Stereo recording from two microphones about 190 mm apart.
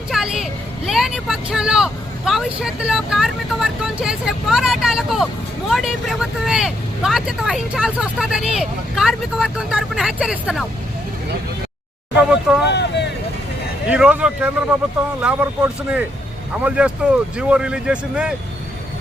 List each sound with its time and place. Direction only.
0.1 s a sound: centre (ahead or behind)
0.9 s vehicle: centre (ahead or behind)
5.6 s speech: centre (ahead or behind)
12.1 s a sound: 5° right (ahead or behind)
12.7 s vehicle: 65° left (ahead or behind)
13.8 s vehicle: 5° right (ahead or behind)
15.2 s speech: 5° right (ahead or behind)